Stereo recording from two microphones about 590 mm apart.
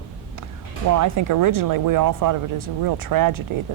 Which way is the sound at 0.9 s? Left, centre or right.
Right.